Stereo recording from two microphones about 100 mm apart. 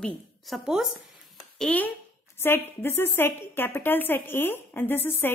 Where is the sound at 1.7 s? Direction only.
10° left (ahead or behind).